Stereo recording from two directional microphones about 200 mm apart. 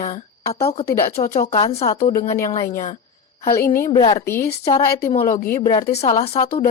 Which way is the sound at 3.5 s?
15° left (ahead or behind).